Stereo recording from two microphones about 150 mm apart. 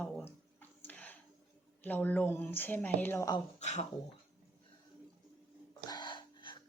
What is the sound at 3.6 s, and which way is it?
Speech, 50° left (ahead or behind).